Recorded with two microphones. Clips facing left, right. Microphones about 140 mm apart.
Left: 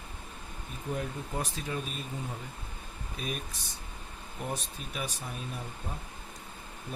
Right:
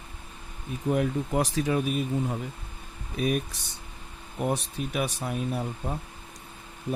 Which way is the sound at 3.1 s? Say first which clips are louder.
Right 11 dB; 65° right (ahead or behind).